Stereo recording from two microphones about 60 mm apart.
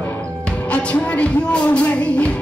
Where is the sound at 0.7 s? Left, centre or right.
Left.